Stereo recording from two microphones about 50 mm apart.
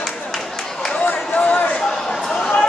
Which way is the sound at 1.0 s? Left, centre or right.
Left.